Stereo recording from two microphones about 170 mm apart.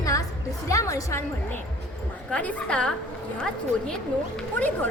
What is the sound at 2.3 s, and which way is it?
Speech, 5° left (ahead or behind).